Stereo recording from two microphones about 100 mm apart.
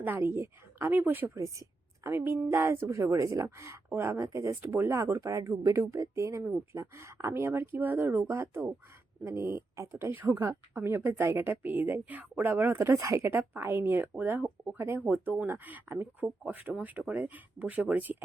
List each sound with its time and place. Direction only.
0.0 s a woman's voice: 20° right (ahead or behind)
14.8 s a woman's voice: 25° right (ahead or behind)